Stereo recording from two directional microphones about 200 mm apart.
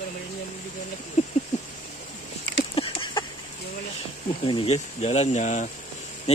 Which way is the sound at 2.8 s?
30° left (ahead or behind).